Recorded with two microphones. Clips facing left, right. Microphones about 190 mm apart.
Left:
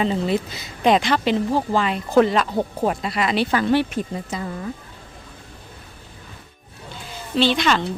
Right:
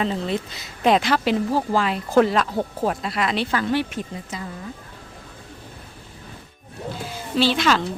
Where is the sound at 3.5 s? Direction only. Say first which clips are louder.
Left 4 dB; 20° left (ahead or behind).